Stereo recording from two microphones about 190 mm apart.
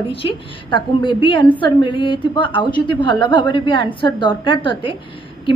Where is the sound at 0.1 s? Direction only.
25° left (ahead or behind).